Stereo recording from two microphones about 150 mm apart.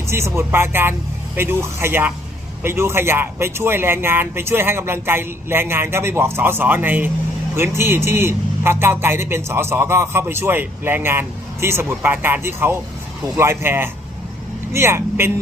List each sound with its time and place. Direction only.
0.1 s a man's voice: 15° right (ahead or behind)